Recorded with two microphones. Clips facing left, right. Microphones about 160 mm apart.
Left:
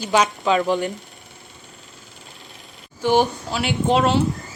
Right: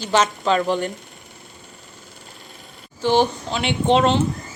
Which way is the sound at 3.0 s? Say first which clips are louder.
Even; 10° left (ahead or behind).